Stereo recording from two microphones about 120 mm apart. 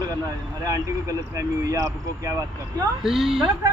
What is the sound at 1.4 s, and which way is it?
Speech, 30° right (ahead or behind).